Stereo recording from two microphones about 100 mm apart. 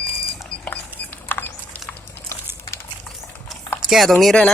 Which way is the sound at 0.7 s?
15° left (ahead or behind).